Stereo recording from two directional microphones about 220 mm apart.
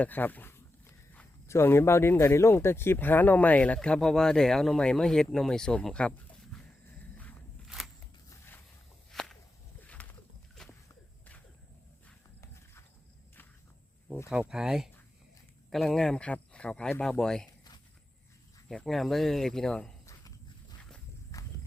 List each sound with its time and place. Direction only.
0.0 s speech: 10° left (ahead or behind)
7.2 s a sound: 5° left (ahead or behind)
9.1 s whip: centre (ahead or behind)
9.8 s walk: 5° left (ahead or behind)
12.0 s horse: 10° left (ahead or behind)
14.3 s speech: 5° right (ahead or behind)
18.7 s speech: centre (ahead or behind)
20.1 s walk: 15° left (ahead or behind)